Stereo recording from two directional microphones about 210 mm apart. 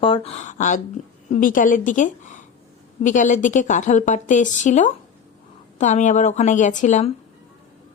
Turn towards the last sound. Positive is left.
turn(degrees=35)  # may be behind; listen again after turning